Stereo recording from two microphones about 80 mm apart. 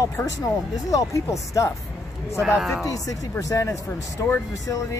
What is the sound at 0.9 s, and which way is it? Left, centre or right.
Speech, left.